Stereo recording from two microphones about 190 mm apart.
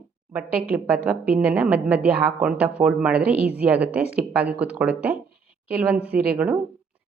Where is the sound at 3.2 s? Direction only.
55° right (ahead or behind).